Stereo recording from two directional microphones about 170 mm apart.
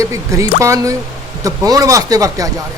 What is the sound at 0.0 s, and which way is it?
Speech, 20° right (ahead or behind).